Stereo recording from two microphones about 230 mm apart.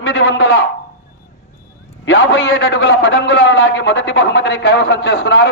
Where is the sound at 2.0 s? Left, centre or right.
Left.